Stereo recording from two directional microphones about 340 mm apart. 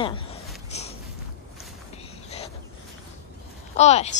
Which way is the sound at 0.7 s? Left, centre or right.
Centre.